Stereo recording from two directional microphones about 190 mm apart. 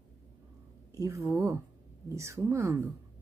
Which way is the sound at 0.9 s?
15° right (ahead or behind).